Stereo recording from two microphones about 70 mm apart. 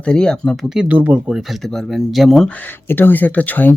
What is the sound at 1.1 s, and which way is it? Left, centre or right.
Speech, centre.